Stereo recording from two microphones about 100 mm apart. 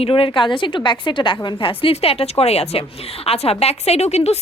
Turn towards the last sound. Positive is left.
turn(degrees=90)